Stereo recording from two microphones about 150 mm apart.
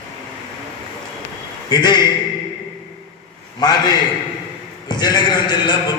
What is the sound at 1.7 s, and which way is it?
Speech, 30° left (ahead or behind).